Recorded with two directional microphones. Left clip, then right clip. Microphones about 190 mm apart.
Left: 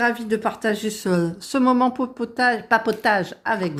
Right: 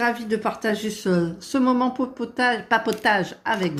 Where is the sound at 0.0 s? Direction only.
30° left (ahead or behind).